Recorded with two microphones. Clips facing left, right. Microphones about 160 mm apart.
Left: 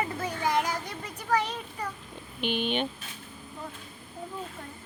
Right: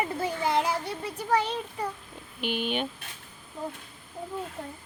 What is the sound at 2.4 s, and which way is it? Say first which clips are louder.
Speech: left 1 dB; 5° right (ahead or behind).